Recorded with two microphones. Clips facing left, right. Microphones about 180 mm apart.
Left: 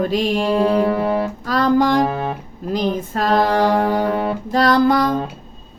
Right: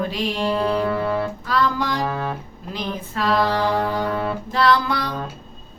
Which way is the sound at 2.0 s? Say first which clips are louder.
Left 5 dB; 25° left (ahead or behind).